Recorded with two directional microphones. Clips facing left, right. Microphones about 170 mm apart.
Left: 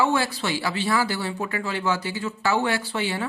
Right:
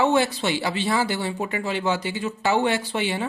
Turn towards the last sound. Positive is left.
turn(degrees=-20)  # may be behind; listen again after turning